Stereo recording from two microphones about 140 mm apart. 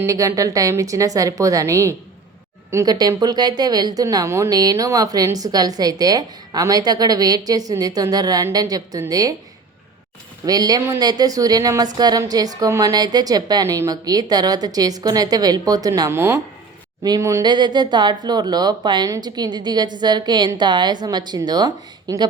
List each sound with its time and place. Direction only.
0.0 s a woman's voice: 20° right (ahead or behind)
10.4 s a woman's voice: 30° right (ahead or behind)
17.4 s a woman's voice: 30° right (ahead or behind)